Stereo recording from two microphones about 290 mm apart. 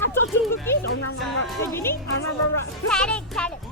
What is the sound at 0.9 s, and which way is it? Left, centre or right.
Speech, left.